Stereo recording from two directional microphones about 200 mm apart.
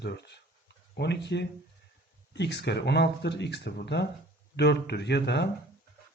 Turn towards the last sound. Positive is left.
turn(degrees=55)  # may be behind; listen again after turning